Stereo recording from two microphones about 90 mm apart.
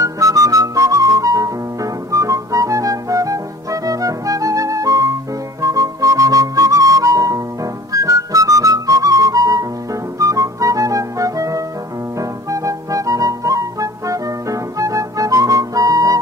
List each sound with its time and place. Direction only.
0.0 s music: 40° right (ahead or behind)